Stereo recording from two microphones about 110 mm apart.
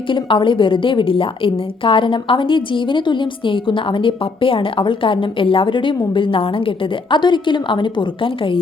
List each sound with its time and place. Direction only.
0.1 s a woman's voice: 50° left (ahead or behind)